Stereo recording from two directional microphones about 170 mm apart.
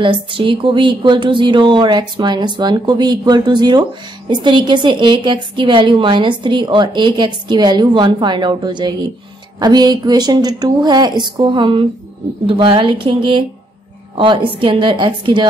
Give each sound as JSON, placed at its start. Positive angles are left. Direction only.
{"t": 0.0, "sound": "a woman's voice", "side_deg": -30}